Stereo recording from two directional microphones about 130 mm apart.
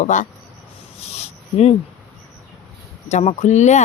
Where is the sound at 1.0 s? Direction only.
55° left (ahead or behind).